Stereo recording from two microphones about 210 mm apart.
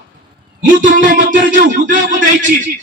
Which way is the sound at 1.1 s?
55° right (ahead or behind).